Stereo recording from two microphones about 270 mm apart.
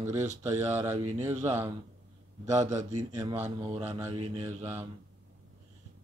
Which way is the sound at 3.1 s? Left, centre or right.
Centre.